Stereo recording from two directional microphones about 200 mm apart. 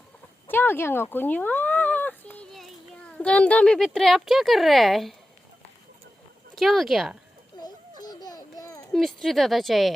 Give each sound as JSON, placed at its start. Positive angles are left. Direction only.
{"t": 0.4, "sound": "a sound", "side_deg": 10}
{"t": 1.1, "sound": "speech", "side_deg": 10}
{"t": 6.6, "sound": "speech", "side_deg": 0}
{"t": 7.6, "sound": "babbling", "side_deg": 20}
{"t": 8.9, "sound": "speech", "side_deg": 0}